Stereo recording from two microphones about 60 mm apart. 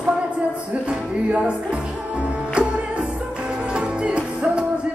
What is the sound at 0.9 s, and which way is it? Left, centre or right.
Music, centre.